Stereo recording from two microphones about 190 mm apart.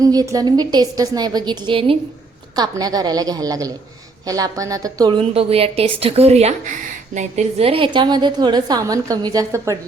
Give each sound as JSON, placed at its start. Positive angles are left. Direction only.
{"t": 0.0, "sound": "a woman's voice", "side_deg": -20}